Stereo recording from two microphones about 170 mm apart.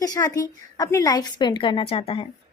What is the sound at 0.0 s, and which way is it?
Speech, 20° left (ahead or behind).